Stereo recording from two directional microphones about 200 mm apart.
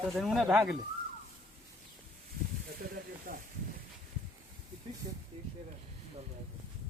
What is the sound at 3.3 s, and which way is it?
Hiss, 45° right (ahead or behind).